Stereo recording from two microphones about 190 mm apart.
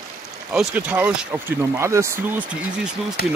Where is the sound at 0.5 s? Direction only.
10° right (ahead or behind).